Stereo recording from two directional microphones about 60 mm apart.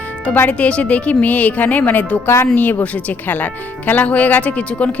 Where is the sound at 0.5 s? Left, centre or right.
Left.